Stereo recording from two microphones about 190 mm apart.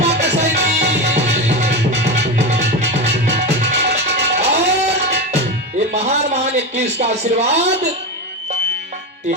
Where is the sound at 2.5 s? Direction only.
35° right (ahead or behind).